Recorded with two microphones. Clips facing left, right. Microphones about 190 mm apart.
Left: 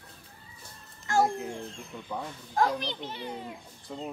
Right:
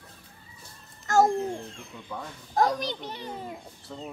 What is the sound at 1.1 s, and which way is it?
Speech, 40° right (ahead or behind).